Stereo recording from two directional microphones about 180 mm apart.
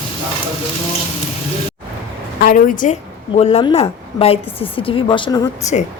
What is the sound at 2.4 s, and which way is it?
Speech, 50° left (ahead or behind).